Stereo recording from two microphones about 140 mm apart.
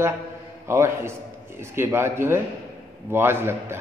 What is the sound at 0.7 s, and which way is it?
A man's voice, 20° right (ahead or behind).